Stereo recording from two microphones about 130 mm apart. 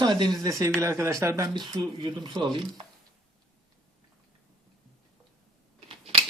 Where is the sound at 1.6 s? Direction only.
35° right (ahead or behind).